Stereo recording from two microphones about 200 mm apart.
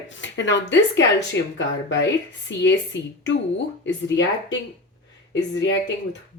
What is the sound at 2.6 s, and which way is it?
Speech, 65° left (ahead or behind).